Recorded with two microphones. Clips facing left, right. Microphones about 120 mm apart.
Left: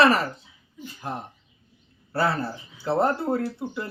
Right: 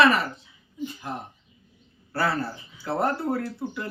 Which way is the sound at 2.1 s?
25° left (ahead or behind).